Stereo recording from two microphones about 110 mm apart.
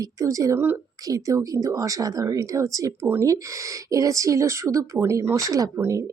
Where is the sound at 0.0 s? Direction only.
30° right (ahead or behind).